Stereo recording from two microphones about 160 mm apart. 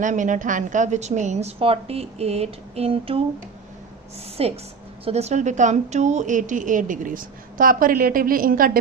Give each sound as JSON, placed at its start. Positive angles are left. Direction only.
{"t": 0.0, "sound": "a woman's voice", "side_deg": -50}
{"t": 4.4, "sound": "a woman's voice", "side_deg": -40}